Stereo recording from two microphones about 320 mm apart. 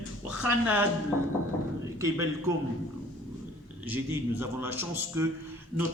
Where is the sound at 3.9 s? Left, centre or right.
Centre.